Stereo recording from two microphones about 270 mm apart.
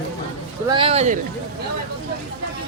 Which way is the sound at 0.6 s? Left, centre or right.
Centre.